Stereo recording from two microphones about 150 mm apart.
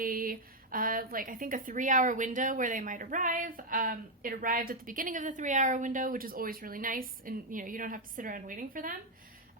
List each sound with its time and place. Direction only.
0.0 s a woman's voice: 70° right (ahead or behind)